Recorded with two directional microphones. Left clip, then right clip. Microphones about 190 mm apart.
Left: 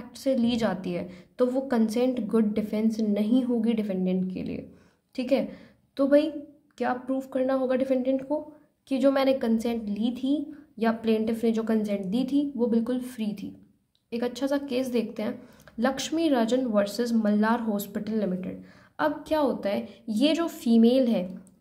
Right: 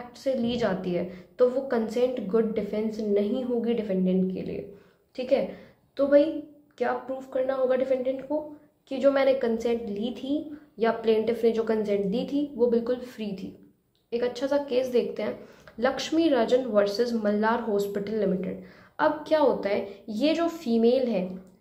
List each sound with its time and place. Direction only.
0.1 s a woman's voice: 40° left (ahead or behind)